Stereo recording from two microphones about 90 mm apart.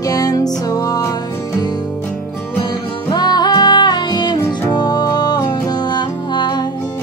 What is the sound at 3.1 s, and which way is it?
Music, 55° left (ahead or behind).